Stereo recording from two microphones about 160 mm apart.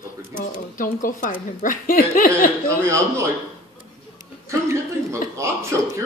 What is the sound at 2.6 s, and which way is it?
Speech, 20° right (ahead or behind).